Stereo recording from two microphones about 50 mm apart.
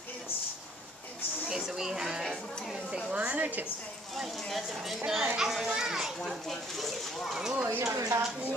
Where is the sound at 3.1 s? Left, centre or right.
Right.